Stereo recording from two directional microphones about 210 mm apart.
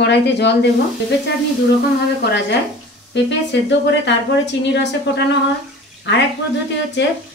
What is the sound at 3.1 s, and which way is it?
Speech, 55° left (ahead or behind).